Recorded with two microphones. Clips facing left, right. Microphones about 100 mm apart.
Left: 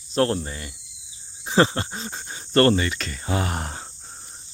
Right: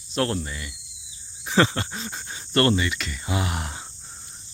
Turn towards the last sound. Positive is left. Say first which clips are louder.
# left 2 dB
turn(degrees=40)  # may be behind; listen again after turning